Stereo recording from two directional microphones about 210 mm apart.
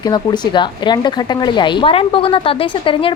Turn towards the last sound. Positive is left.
turn(degrees=25)  # may be behind; listen again after turning